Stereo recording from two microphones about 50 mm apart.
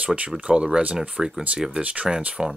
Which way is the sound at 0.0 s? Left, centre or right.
Right.